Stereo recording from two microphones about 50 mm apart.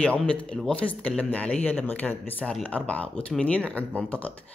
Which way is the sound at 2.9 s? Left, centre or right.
Left.